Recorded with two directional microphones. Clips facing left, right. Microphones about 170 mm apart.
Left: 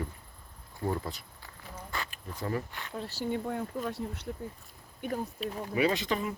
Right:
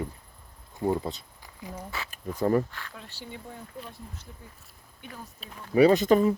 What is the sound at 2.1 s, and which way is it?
Speech, 45° right (ahead or behind).